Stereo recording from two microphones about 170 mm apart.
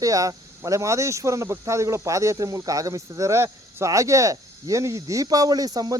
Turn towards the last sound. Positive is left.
turn(degrees=-20)  # may be behind; listen again after turning